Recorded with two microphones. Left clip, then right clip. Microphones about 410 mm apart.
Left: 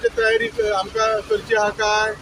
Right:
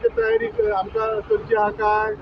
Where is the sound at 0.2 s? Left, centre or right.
Right.